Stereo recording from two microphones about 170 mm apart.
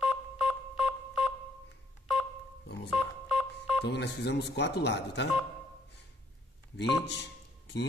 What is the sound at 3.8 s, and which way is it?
Speech, 80° left.